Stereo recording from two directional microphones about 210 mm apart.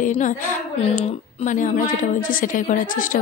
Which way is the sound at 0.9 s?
35° left (ahead or behind).